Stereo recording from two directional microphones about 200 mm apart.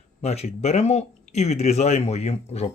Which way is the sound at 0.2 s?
30° left (ahead or behind).